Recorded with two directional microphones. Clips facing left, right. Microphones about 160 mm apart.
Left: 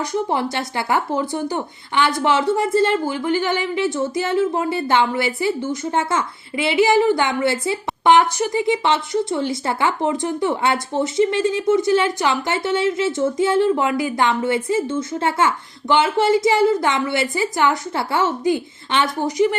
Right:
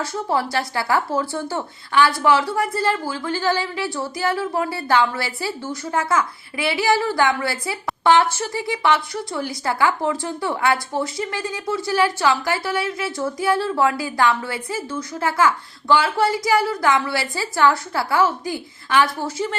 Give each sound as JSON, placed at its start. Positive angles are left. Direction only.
{"t": 0.0, "sound": "speech", "side_deg": 20}